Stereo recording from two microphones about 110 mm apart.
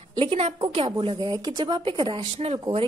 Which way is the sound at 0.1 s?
60° right (ahead or behind).